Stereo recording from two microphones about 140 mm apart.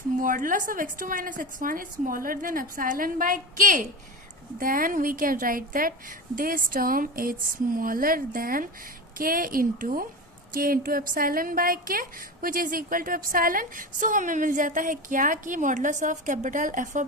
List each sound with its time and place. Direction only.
0.2 s a woman's voice: 75° right (ahead or behind)
4.5 s a woman's voice: 85° right; by 17.1 s 65° right (ahead or behind)